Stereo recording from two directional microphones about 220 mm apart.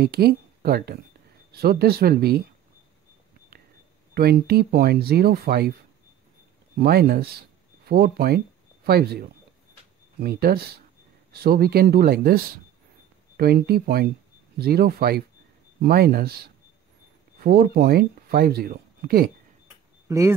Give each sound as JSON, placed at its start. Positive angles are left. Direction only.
{"t": 0.0, "sound": "speech", "side_deg": -45}
{"t": 4.1, "sound": "speech", "side_deg": -45}
{"t": 6.8, "sound": "speech", "side_deg": -45}
{"t": 20.1, "sound": "speech", "side_deg": -15}